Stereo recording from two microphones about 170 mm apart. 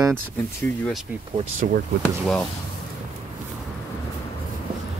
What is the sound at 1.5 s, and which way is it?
Speech, 50° right (ahead or behind).